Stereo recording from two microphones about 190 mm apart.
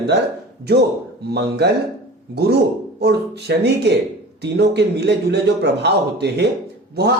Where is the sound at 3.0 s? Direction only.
60° right (ahead or behind).